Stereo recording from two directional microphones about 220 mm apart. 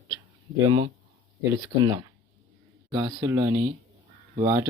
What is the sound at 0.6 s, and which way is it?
A man's voice, 20° right (ahead or behind).